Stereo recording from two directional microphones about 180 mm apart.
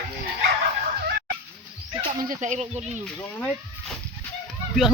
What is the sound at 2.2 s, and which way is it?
Speech, 45° right (ahead or behind).